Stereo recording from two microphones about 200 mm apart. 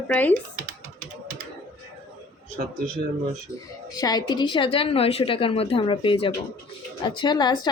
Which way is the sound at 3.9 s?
20° left (ahead or behind).